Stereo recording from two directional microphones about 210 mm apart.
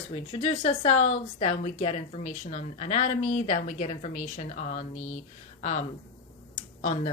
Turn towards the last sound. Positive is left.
turn(degrees=35)  # may be behind; listen again after turning